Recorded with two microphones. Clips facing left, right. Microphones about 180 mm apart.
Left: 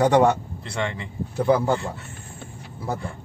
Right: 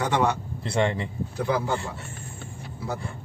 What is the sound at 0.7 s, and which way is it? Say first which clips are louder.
Speech: right 4 dB; 30° right (ahead or behind).